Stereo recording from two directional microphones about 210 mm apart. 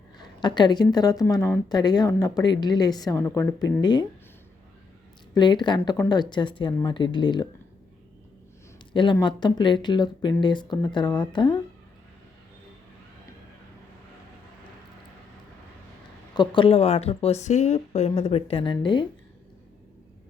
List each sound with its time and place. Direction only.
0.2 s a woman's voice: 20° left (ahead or behind)
5.3 s speech: 20° left (ahead or behind)
8.9 s speech: 25° left (ahead or behind)
16.3 s speech: 20° left (ahead or behind)